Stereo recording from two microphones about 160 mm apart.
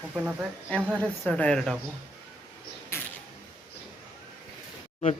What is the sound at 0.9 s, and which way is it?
Speech, 10° left (ahead or behind).